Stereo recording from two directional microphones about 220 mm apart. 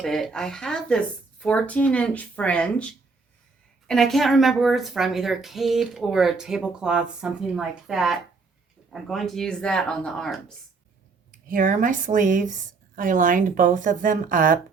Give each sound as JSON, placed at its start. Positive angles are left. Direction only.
{"t": 0.0, "sound": "speech", "side_deg": 0}
{"t": 11.3, "sound": "speech", "side_deg": -40}